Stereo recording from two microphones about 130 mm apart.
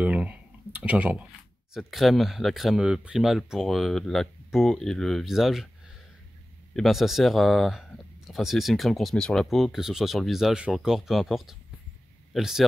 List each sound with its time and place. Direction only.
0.0 s speech: 10° right (ahead or behind)
6.7 s speech: centre (ahead or behind)